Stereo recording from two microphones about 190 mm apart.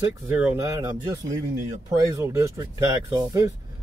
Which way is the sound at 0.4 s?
15° right (ahead or behind).